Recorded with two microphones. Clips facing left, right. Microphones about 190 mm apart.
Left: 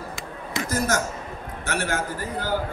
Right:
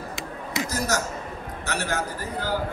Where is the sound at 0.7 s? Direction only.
55° left (ahead or behind).